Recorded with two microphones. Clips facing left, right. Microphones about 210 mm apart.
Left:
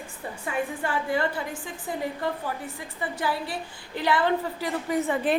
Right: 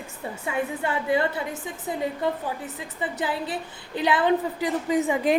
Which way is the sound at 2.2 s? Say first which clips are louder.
Right 3 dB; 20° right (ahead or behind).